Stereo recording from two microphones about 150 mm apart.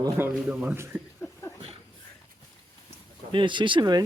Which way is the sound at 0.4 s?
10° right (ahead or behind).